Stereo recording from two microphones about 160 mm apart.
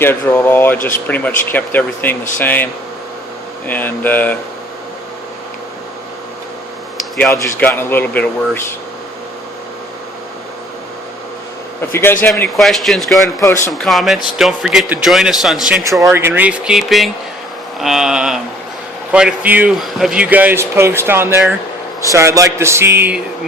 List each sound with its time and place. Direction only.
0.0 s speech: 15° left (ahead or behind)
3.7 s speech: 10° left (ahead or behind)
7.2 s speech: 15° left (ahead or behind)
11.8 s speech: 15° left (ahead or behind)
12.5 s a man's voice: centre (ahead or behind)
13.2 s speech: 20° left (ahead or behind)
13.7 s a man's voice: centre (ahead or behind)
15.8 s a man's voice: 20° right (ahead or behind)